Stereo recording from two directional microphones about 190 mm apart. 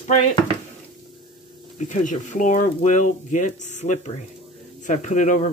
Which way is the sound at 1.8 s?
40° left (ahead or behind).